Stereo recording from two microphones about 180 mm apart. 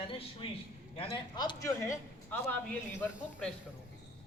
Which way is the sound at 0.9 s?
30° left (ahead or behind).